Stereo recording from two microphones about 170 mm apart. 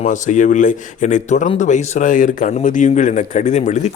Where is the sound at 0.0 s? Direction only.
45° left (ahead or behind).